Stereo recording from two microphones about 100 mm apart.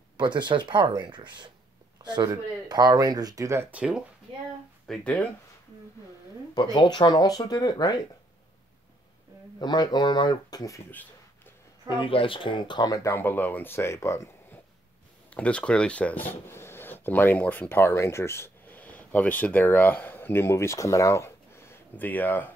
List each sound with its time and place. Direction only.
0.2 s speech: 50° right (ahead or behind); by 3.6 s 30° right (ahead or behind)
3.7 s speech: 10° right (ahead or behind)
4.8 s speech: 10° left (ahead or behind)
6.5 s speech: 45° left (ahead or behind)
9.6 s speech: 45° left (ahead or behind)
11.9 s speech: 60° left (ahead or behind); by 13.1 s 40° left (ahead or behind)
13.1 s speech: 20° left (ahead or behind)
15.2 s speech: 10° left (ahead or behind)